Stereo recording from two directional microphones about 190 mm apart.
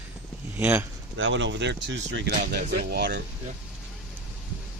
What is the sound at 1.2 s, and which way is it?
Speech, 75° right (ahead or behind).